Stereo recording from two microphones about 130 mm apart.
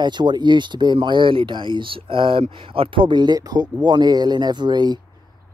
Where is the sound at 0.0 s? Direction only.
35° right (ahead or behind).